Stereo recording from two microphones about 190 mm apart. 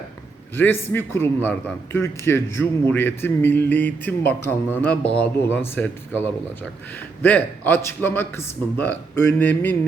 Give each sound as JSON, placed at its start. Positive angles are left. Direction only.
{"t": 0.5, "sound": "speech", "side_deg": 10}